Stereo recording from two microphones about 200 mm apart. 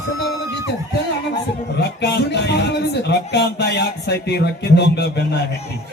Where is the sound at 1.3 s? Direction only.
55° left (ahead or behind).